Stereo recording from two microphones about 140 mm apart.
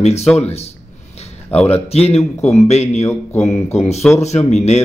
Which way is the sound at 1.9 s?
45° left (ahead or behind).